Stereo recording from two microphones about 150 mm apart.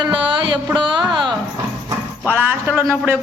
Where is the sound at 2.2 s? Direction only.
15° right (ahead or behind).